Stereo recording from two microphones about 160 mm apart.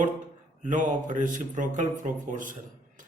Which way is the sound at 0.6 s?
50° right (ahead or behind).